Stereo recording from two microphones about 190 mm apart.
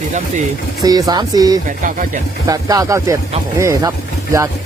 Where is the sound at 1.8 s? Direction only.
45° right (ahead or behind).